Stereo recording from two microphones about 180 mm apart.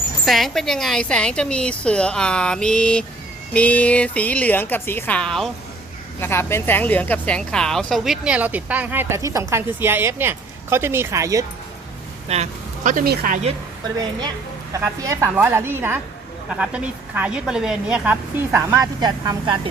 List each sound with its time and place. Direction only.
0.3 s a woman's voice: centre (ahead or behind); by 11.4 s 20° right (ahead or behind)
12.3 s speech: 40° right (ahead or behind)
14.7 s speech: 15° right (ahead or behind)